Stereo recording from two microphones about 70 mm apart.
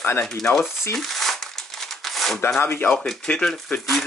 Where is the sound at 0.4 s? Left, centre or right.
Centre.